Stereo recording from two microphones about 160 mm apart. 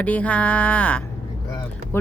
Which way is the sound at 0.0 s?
10° left (ahead or behind).